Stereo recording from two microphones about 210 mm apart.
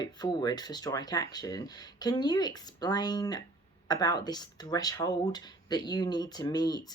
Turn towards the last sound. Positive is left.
turn(degrees=20)  # may be behind; listen again after turning